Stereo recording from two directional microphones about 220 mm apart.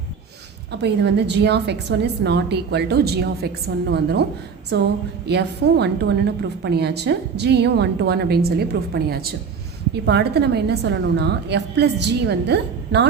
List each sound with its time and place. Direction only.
0.8 s a woman's voice: 50° right (ahead or behind)